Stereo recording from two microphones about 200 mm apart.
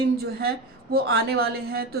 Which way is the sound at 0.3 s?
50° right (ahead or behind).